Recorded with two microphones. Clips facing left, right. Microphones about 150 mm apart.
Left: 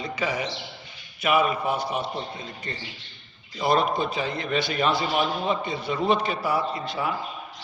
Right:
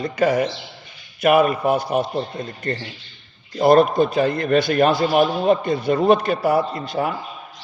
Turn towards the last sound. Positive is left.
turn(degrees=-50)  # may be behind; listen again after turning